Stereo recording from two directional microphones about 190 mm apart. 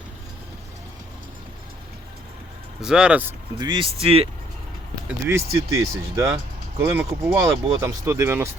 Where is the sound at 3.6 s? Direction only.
25° right (ahead or behind).